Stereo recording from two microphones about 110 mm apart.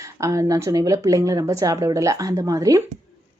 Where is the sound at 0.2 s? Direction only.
30° right (ahead or behind).